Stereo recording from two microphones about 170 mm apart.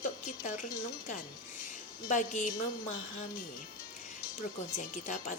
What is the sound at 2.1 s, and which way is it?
Speech, 45° left (ahead or behind).